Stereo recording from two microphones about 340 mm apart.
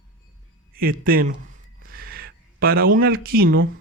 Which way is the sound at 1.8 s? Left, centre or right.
Right.